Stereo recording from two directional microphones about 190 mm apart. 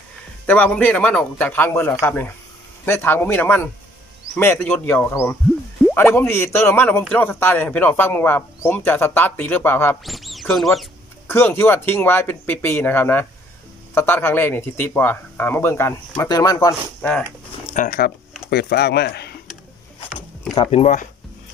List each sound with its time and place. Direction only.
0.5 s speech: 10° left (ahead or behind)
10.0 s speech: centre (ahead or behind)
11.2 s speech: 10° left (ahead or behind)
17.7 s speech: 50° left (ahead or behind)
20.5 s speech: 25° left (ahead or behind)
20.8 s speech: 40° left (ahead or behind)